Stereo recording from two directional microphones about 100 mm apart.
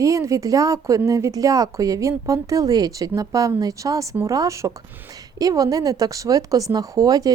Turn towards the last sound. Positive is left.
turn(degrees=-40)  # may be behind; listen again after turning